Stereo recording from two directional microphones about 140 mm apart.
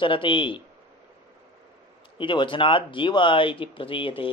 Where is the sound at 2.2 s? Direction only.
35° left (ahead or behind).